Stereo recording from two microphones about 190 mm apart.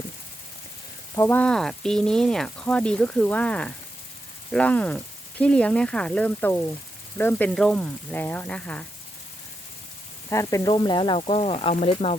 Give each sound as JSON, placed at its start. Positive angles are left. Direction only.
{"t": 1.1, "sound": "speech", "side_deg": 10}
{"t": 10.2, "sound": "speech", "side_deg": 15}